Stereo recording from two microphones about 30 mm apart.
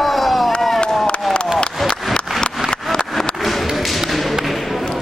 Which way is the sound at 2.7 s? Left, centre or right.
Centre.